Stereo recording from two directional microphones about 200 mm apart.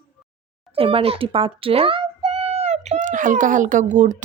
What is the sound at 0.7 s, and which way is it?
A child's voice, 30° right (ahead or behind).